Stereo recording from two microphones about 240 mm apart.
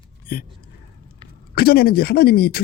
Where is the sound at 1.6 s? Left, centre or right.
Left.